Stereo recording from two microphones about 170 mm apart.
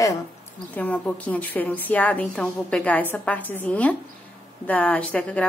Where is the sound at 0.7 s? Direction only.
10° left (ahead or behind).